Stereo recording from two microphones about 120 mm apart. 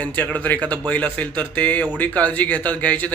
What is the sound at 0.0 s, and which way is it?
A man's voice, 10° left (ahead or behind).